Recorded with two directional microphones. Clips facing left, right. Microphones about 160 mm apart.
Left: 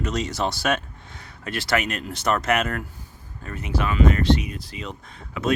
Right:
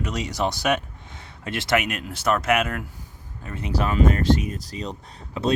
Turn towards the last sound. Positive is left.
turn(degrees=-30)  # may be behind; listen again after turning